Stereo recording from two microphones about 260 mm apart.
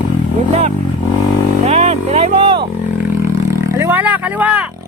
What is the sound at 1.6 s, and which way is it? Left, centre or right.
Speech, right.